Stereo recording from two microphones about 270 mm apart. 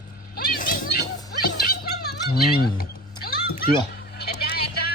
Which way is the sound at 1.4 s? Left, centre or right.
Left.